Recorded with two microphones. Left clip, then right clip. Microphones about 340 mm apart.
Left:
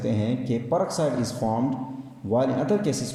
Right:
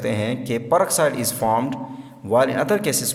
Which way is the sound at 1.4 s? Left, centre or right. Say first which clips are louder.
Right 10 dB; right.